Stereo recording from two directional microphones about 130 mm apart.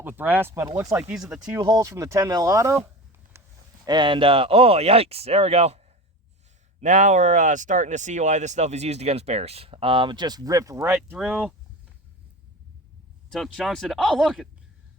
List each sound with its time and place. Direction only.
0.0 s speech: 15° right (ahead or behind)
0.7 s speech: 30° right (ahead or behind)
0.9 s speech: 10° right (ahead or behind)
1.5 s speech: 30° right (ahead or behind)
3.3 s a sound: 20° right (ahead or behind)
3.8 s speech: 35° right (ahead or behind); by 5.8 s 55° right (ahead or behind)
6.7 s speech: 70° right (ahead or behind); by 11.2 s 20° right (ahead or behind)
11.2 s speech: 5° left (ahead or behind)
13.3 s speech: centre (ahead or behind)